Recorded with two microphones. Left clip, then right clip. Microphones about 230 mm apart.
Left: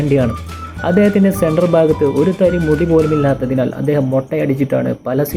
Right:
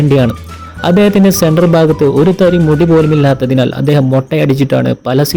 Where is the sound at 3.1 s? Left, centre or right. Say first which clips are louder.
Right 4 dB; right.